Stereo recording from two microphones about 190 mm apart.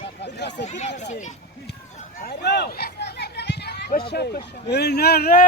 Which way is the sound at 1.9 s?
50° left (ahead or behind).